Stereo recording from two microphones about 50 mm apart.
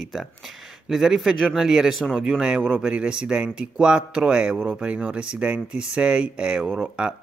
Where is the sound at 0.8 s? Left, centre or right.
Centre.